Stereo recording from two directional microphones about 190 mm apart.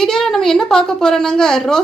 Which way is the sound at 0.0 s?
Centre (ahead or behind).